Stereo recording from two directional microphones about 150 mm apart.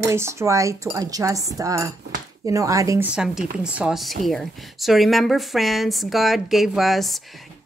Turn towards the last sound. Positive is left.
turn(degrees=0)  # may be behind; listen again after turning